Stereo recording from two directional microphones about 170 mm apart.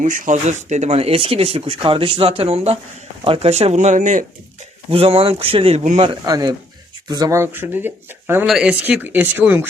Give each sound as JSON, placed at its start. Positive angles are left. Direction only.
{"t": 0.0, "sound": "speech", "side_deg": -45}
{"t": 4.9, "sound": "speech", "side_deg": -35}
{"t": 6.2, "sound": "speech", "side_deg": -20}